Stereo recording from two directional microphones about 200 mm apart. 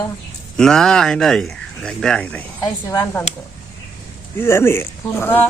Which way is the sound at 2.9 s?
15° left (ahead or behind).